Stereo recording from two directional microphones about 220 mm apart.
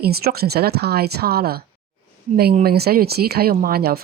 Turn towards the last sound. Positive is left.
turn(degrees=-45)  # may be behind; listen again after turning